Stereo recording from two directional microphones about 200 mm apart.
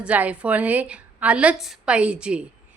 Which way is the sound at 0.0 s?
5° right (ahead or behind).